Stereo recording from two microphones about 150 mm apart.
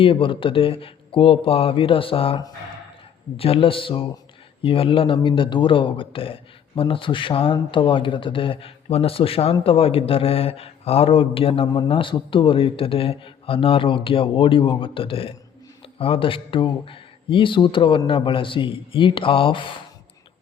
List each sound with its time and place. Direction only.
0.0 s speech: 35° left (ahead or behind)